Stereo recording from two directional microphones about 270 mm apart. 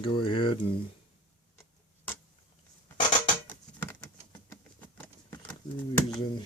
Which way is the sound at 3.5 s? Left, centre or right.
Centre.